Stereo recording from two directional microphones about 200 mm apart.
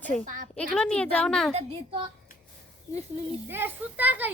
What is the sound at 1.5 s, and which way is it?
Speech, 30° right (ahead or behind).